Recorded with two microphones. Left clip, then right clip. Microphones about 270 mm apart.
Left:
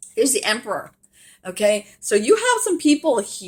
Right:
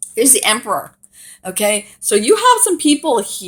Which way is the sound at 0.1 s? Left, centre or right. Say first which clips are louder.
Right 5 dB; right.